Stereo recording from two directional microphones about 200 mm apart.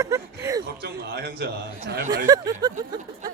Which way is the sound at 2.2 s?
20° right (ahead or behind).